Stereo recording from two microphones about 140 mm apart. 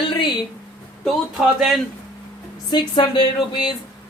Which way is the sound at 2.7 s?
35° left (ahead or behind).